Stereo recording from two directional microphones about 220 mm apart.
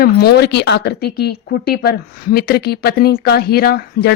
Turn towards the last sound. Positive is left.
turn(degrees=45)  # may be behind; listen again after turning